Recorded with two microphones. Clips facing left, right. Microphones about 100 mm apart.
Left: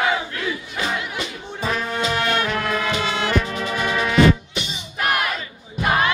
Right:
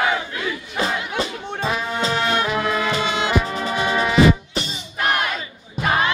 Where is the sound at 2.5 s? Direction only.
10° right (ahead or behind).